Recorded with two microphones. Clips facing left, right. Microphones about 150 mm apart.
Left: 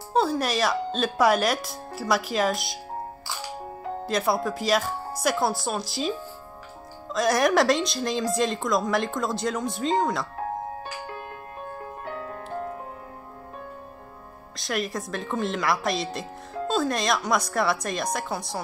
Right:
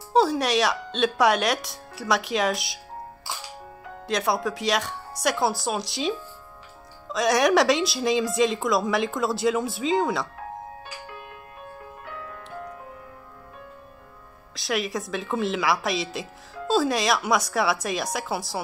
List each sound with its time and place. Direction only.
0.1 s speech: centre (ahead or behind)
4.0 s speech: centre (ahead or behind)
11.8 s music: 35° left (ahead or behind)
14.5 s speech: centre (ahead or behind)